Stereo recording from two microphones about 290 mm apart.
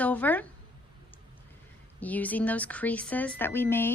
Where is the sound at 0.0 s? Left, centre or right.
Centre.